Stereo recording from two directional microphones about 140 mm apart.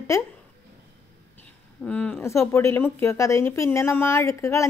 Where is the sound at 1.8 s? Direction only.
10° left (ahead or behind).